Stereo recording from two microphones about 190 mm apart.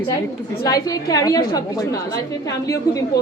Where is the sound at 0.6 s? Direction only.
20° left (ahead or behind).